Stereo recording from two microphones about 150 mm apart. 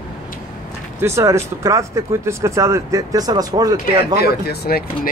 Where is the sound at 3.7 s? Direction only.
90° left.